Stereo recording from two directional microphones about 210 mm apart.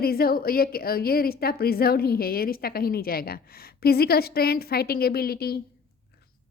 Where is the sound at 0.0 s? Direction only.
45° left (ahead or behind).